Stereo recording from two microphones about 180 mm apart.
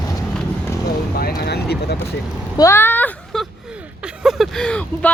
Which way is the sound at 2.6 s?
15° left (ahead or behind).